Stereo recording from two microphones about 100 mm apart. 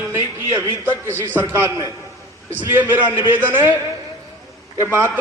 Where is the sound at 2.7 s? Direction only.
20° right (ahead or behind).